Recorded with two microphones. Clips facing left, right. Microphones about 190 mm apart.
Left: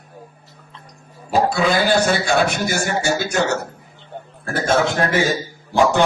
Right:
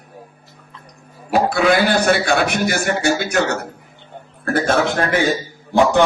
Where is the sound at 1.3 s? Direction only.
60° right (ahead or behind).